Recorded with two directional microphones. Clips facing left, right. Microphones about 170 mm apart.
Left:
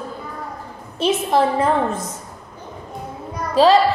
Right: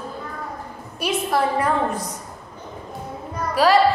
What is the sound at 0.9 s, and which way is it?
A woman's voice, 25° left (ahead or behind).